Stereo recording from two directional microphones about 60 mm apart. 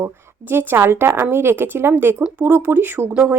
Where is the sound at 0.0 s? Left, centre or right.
Right.